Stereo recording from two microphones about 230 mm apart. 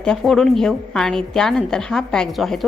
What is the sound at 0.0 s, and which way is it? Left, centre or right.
A woman's voice, centre.